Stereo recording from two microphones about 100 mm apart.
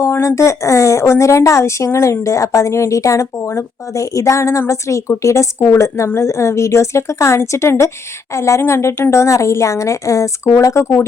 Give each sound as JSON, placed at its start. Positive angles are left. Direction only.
{"t": 0.0, "sound": "speech", "side_deg": 30}